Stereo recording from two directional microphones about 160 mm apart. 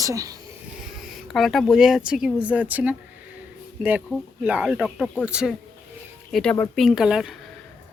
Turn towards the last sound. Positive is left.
turn(degrees=-5)  # may be behind; listen again after turning